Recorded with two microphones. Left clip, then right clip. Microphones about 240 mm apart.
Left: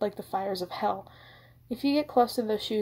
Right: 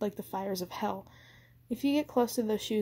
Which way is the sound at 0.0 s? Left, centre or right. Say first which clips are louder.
Left 5 dB; right.